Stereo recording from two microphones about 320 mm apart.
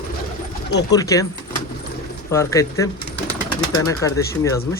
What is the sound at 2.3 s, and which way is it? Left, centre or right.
A man's voice, centre.